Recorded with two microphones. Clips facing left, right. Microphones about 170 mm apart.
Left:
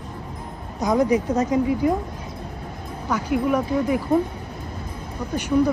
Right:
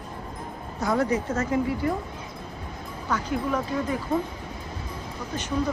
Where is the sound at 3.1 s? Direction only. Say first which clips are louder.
Left 5 dB; 10° left (ahead or behind).